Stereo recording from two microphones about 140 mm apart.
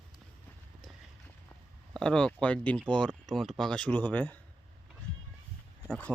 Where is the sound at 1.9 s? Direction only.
5° left (ahead or behind).